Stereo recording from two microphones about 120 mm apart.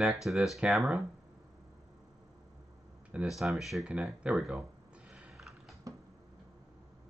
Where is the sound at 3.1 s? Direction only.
5° right (ahead or behind).